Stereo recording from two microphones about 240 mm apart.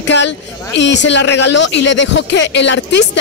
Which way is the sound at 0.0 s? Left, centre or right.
Left.